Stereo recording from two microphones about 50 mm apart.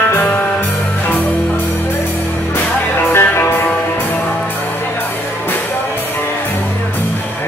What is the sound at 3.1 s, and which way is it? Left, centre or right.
Music, left.